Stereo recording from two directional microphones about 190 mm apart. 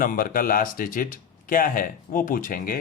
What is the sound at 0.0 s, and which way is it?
Speech, 45° left (ahead or behind).